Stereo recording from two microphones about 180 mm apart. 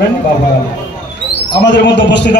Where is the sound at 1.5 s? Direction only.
75° left (ahead or behind).